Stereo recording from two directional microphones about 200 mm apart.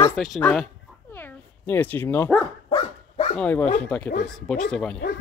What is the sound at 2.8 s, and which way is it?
Dog, 25° left (ahead or behind).